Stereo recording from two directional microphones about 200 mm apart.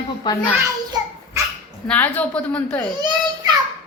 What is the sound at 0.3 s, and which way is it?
Speech, 20° left (ahead or behind).